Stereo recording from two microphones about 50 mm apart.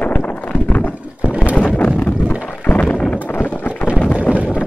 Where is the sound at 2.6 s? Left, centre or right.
Left.